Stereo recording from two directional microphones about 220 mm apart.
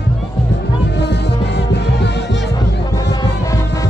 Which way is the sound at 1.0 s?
50° left (ahead or behind).